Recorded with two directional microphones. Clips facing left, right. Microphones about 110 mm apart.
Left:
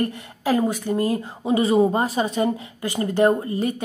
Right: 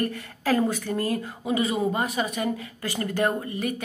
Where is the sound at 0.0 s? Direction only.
20° left (ahead or behind).